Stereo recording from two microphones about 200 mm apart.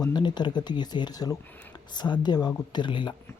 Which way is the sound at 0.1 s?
20° left (ahead or behind).